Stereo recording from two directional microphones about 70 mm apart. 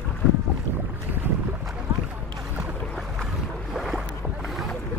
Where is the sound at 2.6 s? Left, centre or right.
Centre.